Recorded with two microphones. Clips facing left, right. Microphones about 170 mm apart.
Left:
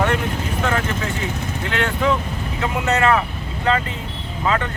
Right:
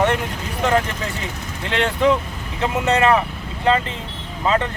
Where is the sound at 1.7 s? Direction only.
25° right (ahead or behind).